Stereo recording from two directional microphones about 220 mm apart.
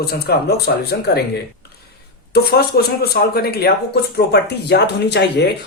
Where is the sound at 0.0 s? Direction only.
45° left (ahead or behind).